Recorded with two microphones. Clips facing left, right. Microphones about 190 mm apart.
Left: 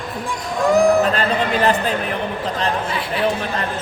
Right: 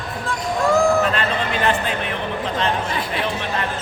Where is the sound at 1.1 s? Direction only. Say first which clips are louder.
Left 3 dB; 35° left (ahead or behind).